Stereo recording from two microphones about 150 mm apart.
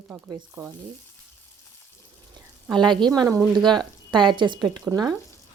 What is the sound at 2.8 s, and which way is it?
Speech, 30° right (ahead or behind).